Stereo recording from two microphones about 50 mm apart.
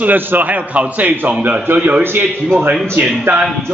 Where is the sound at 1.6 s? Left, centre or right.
Right.